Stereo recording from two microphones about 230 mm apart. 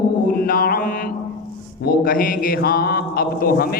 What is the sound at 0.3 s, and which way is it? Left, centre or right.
Music, left.